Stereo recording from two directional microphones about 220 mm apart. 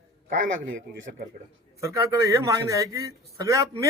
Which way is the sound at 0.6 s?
45° right (ahead or behind).